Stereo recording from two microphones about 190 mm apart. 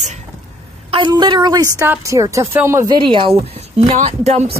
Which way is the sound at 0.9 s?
25° right (ahead or behind).